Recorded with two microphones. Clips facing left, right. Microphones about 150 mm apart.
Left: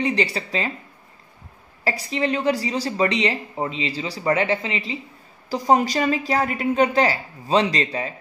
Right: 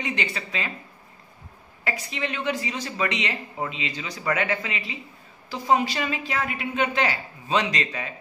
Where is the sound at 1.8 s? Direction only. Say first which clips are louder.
Left 7 dB; 35° left (ahead or behind).